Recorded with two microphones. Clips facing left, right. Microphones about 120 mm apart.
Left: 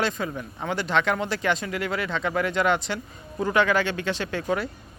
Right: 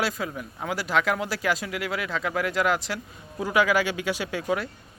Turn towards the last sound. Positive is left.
turn(degrees=-5)  # may be behind; listen again after turning